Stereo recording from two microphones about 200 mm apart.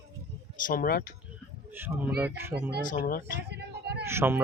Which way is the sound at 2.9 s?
45° left (ahead or behind).